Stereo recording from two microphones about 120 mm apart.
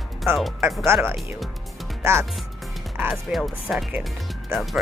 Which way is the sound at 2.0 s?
20° right (ahead or behind).